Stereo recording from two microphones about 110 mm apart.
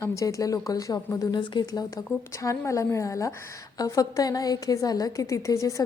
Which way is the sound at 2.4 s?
30° left (ahead or behind).